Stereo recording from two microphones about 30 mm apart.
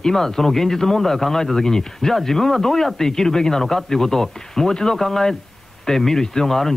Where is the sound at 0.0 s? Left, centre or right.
Centre.